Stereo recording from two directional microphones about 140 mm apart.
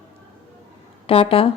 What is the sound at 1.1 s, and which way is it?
Speech, 40° left (ahead or behind).